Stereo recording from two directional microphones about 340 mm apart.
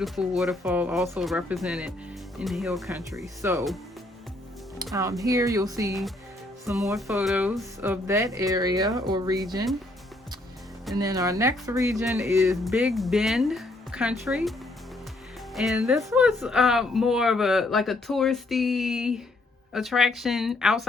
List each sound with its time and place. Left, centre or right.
0.0 s speech: centre
4.9 s speech: centre
10.9 s speech: centre
15.5 s speech: centre